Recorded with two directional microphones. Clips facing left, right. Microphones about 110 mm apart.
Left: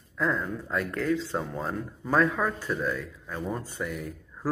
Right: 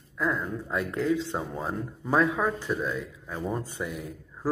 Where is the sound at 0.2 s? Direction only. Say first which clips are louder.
Left 1 dB; 5° right (ahead or behind).